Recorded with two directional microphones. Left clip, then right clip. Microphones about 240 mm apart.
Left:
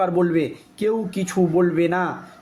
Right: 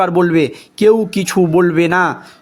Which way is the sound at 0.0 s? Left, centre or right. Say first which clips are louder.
Right 7 dB; right.